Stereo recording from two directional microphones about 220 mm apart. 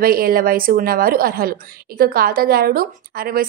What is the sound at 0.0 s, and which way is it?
A woman's voice, 45° right (ahead or behind).